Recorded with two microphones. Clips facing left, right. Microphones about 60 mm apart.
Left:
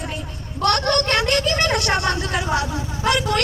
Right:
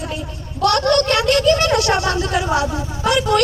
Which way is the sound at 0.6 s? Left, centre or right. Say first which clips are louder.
Right 4 dB; left.